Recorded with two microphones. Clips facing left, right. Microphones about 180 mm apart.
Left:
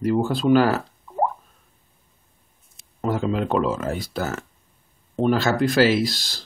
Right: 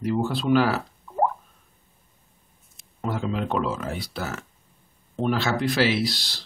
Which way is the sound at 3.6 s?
40° left (ahead or behind).